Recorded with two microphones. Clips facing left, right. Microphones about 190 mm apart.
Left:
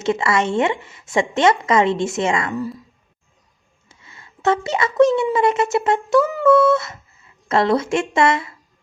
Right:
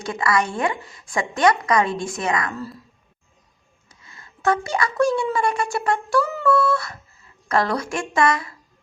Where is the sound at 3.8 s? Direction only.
25° left (ahead or behind).